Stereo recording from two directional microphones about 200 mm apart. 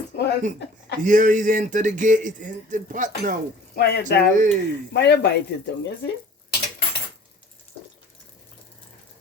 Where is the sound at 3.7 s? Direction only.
55° left (ahead or behind).